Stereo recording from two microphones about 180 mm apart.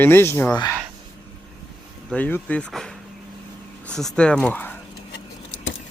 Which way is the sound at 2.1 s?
10° left (ahead or behind).